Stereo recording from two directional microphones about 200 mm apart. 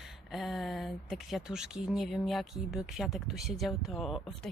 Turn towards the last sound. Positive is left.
turn(degrees=0)  # may be behind; listen again after turning